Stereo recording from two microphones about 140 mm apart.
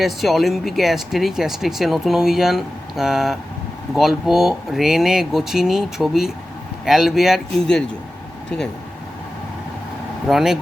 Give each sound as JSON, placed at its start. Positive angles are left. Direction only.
{"t": 0.0, "sound": "speech", "side_deg": 0}
{"t": 10.2, "sound": "speech", "side_deg": -5}